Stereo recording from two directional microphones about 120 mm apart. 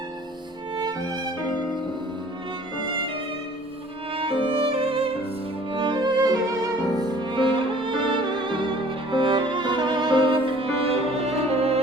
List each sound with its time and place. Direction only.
0.8 s music: 35° right (ahead or behind)
4.1 s violin: 50° right (ahead or behind)
5.7 s music: 40° right (ahead or behind)